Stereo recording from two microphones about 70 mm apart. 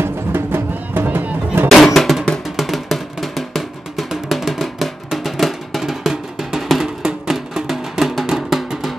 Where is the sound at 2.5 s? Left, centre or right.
Centre.